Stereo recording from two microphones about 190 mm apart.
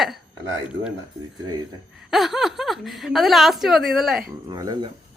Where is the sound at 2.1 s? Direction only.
Centre (ahead or behind).